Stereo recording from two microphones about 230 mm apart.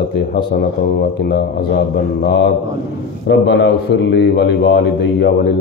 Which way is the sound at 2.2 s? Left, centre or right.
Left.